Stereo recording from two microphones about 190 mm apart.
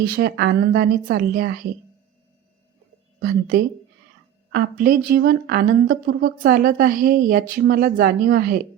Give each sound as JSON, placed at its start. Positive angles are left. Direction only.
{"t": 0.1, "sound": "a woman's voice", "side_deg": -55}
{"t": 3.2, "sound": "a woman's voice", "side_deg": -60}